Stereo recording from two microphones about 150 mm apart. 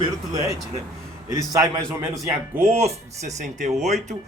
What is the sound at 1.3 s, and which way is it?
Speech, 20° right (ahead or behind).